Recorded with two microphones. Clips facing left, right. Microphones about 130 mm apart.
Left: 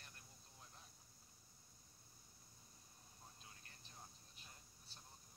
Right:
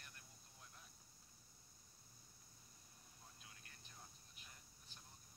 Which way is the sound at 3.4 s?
30° left (ahead or behind).